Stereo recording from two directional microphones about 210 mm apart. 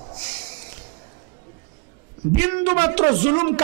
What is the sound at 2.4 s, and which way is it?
A man's voice, 15° right (ahead or behind).